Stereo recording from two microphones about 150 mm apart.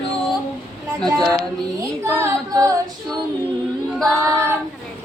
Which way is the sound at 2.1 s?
15° right (ahead or behind).